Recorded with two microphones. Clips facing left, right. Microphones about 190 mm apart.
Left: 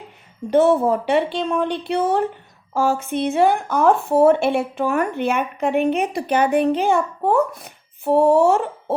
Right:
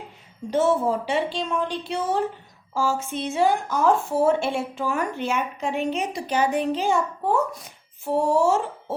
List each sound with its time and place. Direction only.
0.5 s speech: 60° left (ahead or behind)